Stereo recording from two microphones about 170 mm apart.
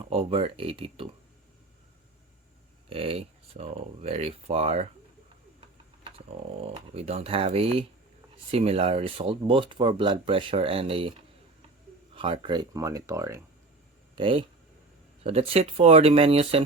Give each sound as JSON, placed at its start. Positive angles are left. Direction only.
{"t": 0.1, "sound": "speech", "side_deg": -35}
{"t": 2.9, "sound": "speech", "side_deg": -35}
{"t": 6.1, "sound": "speech", "side_deg": -35}
{"t": 12.1, "sound": "speech", "side_deg": -30}
{"t": 14.2, "sound": "speech", "side_deg": -30}